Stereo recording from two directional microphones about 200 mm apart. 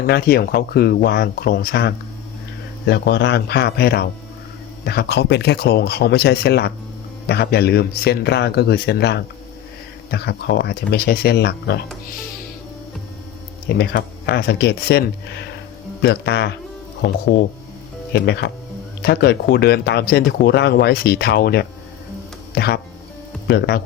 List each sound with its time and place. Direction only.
0.0 s speech: 50° left (ahead or behind)
13.7 s speech: 55° left (ahead or behind)
18.1 s speech: 60° left (ahead or behind)